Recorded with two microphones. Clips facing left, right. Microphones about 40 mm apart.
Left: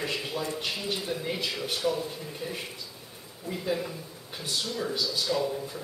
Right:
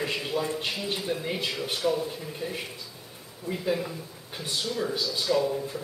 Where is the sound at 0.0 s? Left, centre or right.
Centre.